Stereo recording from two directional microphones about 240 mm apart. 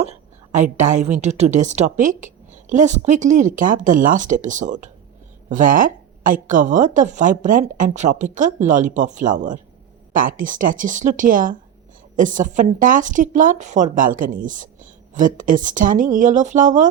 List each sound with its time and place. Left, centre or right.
0.0 s a woman's voice: right